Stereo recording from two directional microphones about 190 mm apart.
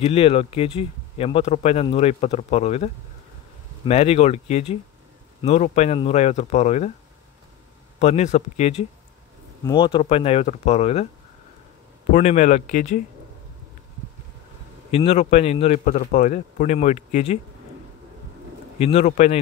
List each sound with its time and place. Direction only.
0.0 s speech: 30° left (ahead or behind)
8.0 s speech: 35° left (ahead or behind)
9.7 s speech: 25° left (ahead or behind)
12.1 s speech: 35° left (ahead or behind)
14.9 s speech: 35° left (ahead or behind)
18.8 s speech: 35° left (ahead or behind)